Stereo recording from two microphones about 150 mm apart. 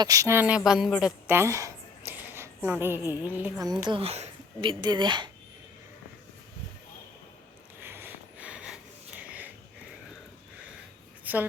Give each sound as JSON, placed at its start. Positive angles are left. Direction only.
{"t": 0.0, "sound": "speech", "side_deg": -20}
{"t": 1.3, "sound": "a sound", "side_deg": -15}
{"t": 2.6, "sound": "speech", "side_deg": -15}
{"t": 3.6, "sound": "speech", "side_deg": -25}
{"t": 7.9, "sound": "wheeze", "side_deg": -15}
{"t": 11.3, "sound": "a sound", "side_deg": -10}